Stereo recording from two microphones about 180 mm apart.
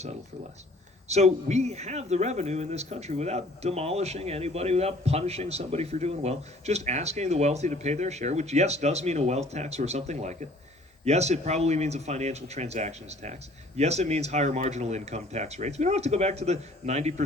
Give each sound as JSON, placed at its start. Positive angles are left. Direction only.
{"t": 1.0, "sound": "a man's voice", "side_deg": -40}